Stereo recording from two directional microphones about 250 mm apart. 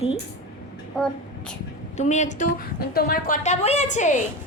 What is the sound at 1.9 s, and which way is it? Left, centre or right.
A woman's voice, left.